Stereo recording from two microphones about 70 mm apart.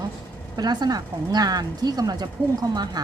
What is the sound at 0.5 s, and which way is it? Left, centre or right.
Speech, right.